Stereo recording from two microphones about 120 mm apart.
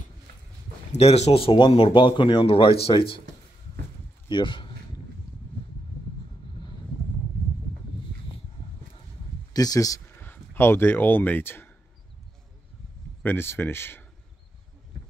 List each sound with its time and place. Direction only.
0.9 s speech: 60° left (ahead or behind)
4.3 s speech: 45° left (ahead or behind)
9.5 s speech: 30° left (ahead or behind)
10.2 s speech: 15° left (ahead or behind)
13.2 s speech: 20° left (ahead or behind)